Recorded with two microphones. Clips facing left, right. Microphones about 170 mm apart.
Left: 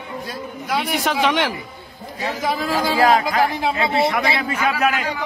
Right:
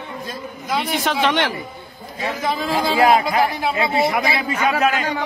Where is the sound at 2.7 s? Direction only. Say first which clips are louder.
Right 1 dB; 15° right (ahead or behind).